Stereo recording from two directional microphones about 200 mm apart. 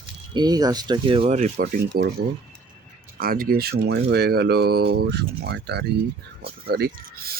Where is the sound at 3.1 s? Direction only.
45° right (ahead or behind).